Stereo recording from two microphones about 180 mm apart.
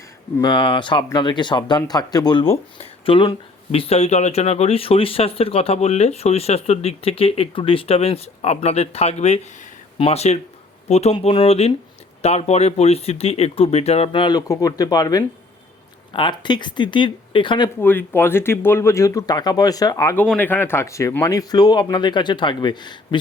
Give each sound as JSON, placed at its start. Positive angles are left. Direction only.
{"t": 0.4, "sound": "speech", "side_deg": 25}
{"t": 17.7, "sound": "speech", "side_deg": 10}
{"t": 20.2, "sound": "speech", "side_deg": 10}